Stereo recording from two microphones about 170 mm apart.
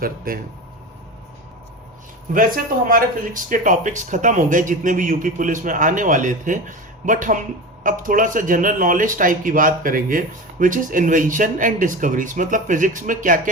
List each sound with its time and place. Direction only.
0.3 s speech: 55° right (ahead or behind)
2.3 s a man's voice: 55° right (ahead or behind)